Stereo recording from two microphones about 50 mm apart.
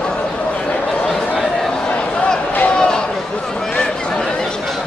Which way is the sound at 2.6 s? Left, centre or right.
Centre.